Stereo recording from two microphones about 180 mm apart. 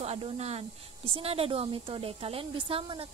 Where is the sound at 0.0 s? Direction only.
35° right (ahead or behind).